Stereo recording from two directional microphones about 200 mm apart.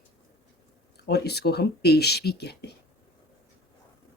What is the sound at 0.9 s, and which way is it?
Speech, 55° left (ahead or behind).